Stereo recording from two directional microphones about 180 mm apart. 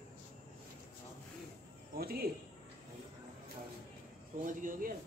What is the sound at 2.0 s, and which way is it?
Speech, 55° right (ahead or behind).